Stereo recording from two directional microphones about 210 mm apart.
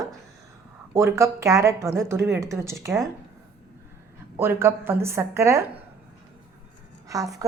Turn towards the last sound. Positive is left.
turn(degrees=-15)  # may be behind; listen again after turning